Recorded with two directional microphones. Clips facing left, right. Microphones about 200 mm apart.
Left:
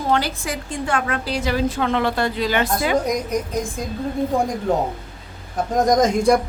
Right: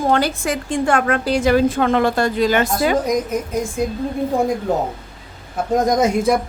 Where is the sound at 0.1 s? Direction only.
50° right (ahead or behind).